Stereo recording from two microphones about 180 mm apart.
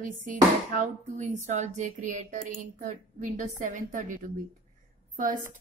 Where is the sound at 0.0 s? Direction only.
50° right (ahead or behind).